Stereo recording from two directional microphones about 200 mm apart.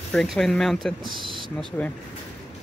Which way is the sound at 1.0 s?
25° right (ahead or behind).